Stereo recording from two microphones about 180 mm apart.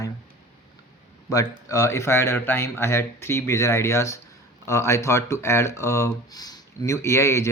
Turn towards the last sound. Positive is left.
turn(degrees=15)  # may be behind; listen again after turning